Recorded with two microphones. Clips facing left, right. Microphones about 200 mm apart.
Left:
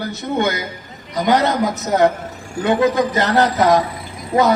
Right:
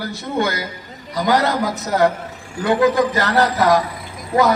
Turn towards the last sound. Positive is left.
turn(degrees=20)  # may be behind; listen again after turning